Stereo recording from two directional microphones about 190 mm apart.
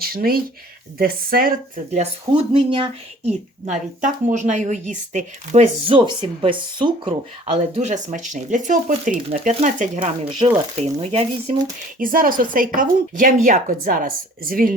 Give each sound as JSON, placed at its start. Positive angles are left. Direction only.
{"t": 0.0, "sound": "a woman's voice", "side_deg": -50}
{"t": 1.7, "sound": "speech", "side_deg": -30}
{"t": 6.4, "sound": "speech", "side_deg": -25}
{"t": 10.4, "sound": "speech", "side_deg": -25}
{"t": 11.9, "sound": "a woman's voice", "side_deg": -45}